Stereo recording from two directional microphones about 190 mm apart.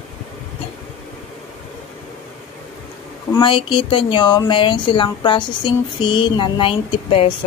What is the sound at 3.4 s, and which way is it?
Speech, 25° left (ahead or behind).